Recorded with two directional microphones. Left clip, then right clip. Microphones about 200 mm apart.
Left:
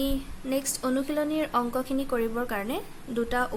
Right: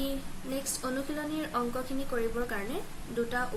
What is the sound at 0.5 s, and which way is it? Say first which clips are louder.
Speech: left 6 dB; 50° left (ahead or behind).